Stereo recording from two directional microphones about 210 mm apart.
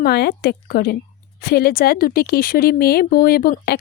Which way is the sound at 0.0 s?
50° left (ahead or behind).